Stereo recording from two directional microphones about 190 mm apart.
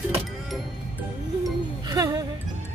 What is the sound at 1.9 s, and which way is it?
Speech, 20° right (ahead or behind).